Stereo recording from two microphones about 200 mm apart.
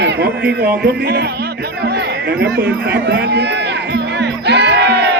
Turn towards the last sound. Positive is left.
turn(degrees=-55)  # may be behind; listen again after turning